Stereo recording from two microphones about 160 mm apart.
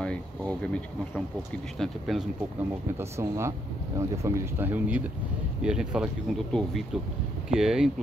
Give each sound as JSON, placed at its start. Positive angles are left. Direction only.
{"t": 0.0, "sound": "speech", "side_deg": 5}
{"t": 2.9, "sound": "speech", "side_deg": -15}